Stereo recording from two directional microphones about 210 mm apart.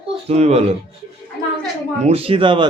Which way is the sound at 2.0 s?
30° right (ahead or behind).